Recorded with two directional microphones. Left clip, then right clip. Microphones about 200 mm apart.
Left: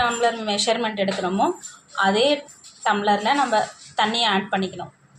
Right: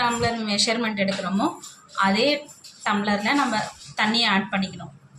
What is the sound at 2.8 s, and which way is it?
A woman's voice, 15° left (ahead or behind).